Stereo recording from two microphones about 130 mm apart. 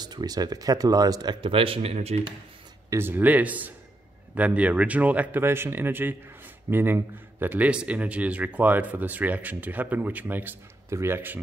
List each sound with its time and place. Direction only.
0.0 s speech: 30° right (ahead or behind); by 2.2 s 55° right (ahead or behind)
2.9 s speech: 15° right (ahead or behind)